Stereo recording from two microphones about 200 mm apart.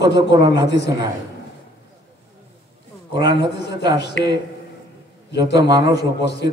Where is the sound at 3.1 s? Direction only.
55° left (ahead or behind).